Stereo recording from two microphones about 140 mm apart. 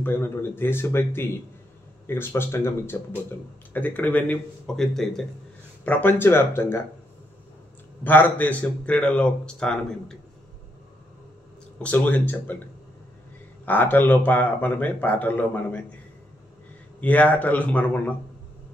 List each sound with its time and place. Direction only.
0.0 s speech: 15° left (ahead or behind)
5.9 s speech: 15° left (ahead or behind)
8.0 s speech: 10° left (ahead or behind)
11.8 s speech: 10° left (ahead or behind)
13.7 s speech: 15° left (ahead or behind)
17.0 s speech: 10° left (ahead or behind)